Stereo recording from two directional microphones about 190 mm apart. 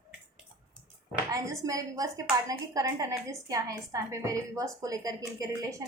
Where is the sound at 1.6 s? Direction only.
20° right (ahead or behind).